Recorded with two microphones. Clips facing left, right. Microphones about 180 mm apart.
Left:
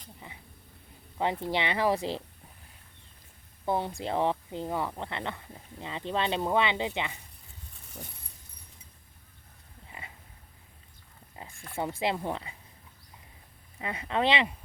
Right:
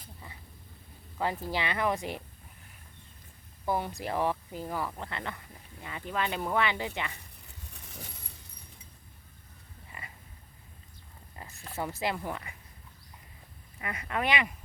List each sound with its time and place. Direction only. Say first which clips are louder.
1.2 s speech: left 3 dB; 25° left (ahead or behind)
3.7 s speech: left 2 dB; 25° left (ahead or behind)
7.2 s a sound: right 2 dB; 70° right (ahead or behind)
11.4 s a sound: left 2 dB; 20° left (ahead or behind)
11.8 s speech: left 3 dB; 25° left (ahead or behind)
13.8 s speech: left 4 dB; 25° left (ahead or behind)